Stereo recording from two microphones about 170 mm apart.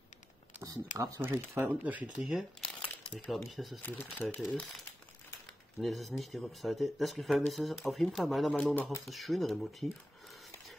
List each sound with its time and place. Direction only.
0.9 s speech: 20° right (ahead or behind)
2.8 s crumpling: 30° left (ahead or behind)
3.3 s speech: centre (ahead or behind)
3.8 s speech: 10° left (ahead or behind)
5.8 s speech: centre (ahead or behind)